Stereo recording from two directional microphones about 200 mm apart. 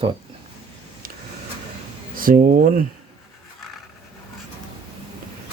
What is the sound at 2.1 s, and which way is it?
Speech, 45° right (ahead or behind).